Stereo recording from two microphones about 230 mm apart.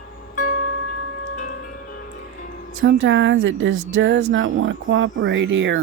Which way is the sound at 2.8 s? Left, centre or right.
Right.